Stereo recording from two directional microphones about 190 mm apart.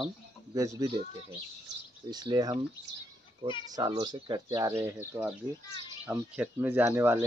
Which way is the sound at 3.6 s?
20° right (ahead or behind).